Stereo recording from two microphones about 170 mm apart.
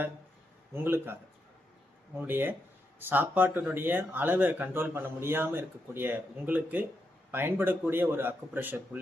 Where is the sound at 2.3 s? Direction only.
10° right (ahead or behind).